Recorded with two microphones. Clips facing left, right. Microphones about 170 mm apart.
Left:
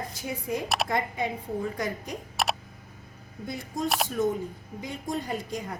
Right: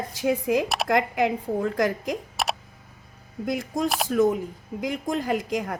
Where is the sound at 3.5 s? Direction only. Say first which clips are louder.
Right 4 dB; 90° right.